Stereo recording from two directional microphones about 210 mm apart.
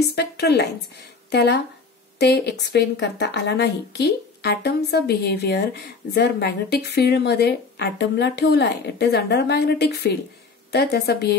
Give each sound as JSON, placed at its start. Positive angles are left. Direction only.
{"t": 0.0, "sound": "speech", "side_deg": 50}